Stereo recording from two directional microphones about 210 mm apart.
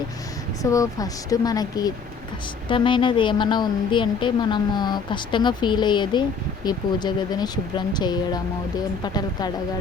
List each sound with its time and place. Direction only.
0.6 s a woman's voice: 15° left (ahead or behind)